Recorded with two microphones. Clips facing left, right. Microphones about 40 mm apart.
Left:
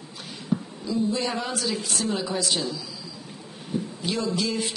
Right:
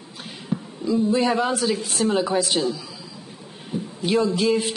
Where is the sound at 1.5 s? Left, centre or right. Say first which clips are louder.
Right 5 dB; right.